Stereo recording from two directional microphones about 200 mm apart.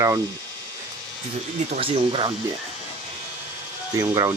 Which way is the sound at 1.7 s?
25° right (ahead or behind).